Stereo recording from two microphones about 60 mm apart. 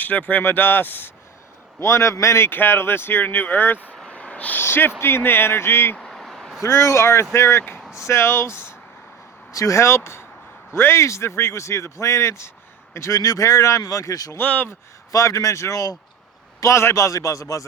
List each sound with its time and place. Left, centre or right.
0.0 s speech: left
1.8 s speech: left
2.5 s speech: left
4.1 s a sound: left
4.5 s speech: left
6.1 s a sound: centre
6.6 s speech: left
9.5 s speech: left
14.3 s speech: left
15.1 s speech: left
16.6 s speech: left